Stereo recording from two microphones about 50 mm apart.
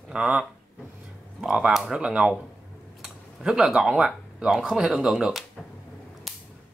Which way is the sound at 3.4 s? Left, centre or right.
Centre.